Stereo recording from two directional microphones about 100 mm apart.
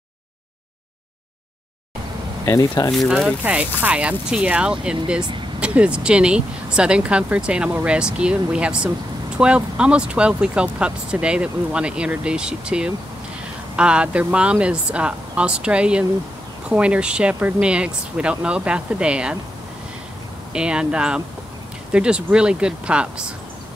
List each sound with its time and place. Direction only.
2.9 s speech: centre (ahead or behind)
20.5 s speech: 10° right (ahead or behind)